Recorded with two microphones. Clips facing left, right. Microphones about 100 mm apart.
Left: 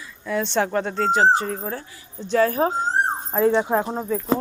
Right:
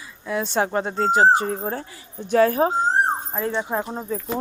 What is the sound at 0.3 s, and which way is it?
Speech, 10° right (ahead or behind).